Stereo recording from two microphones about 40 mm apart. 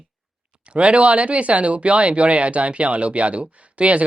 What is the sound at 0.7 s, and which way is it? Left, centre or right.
Speech, right.